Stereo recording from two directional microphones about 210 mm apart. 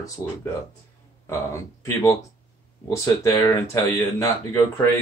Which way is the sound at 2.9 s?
15° left (ahead or behind).